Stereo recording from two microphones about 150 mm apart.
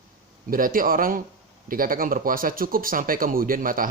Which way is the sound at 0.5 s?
70° right (ahead or behind).